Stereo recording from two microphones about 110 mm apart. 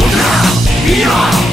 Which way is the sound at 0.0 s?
Centre (ahead or behind).